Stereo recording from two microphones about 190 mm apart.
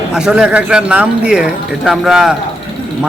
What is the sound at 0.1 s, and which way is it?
Speech, 5° right (ahead or behind).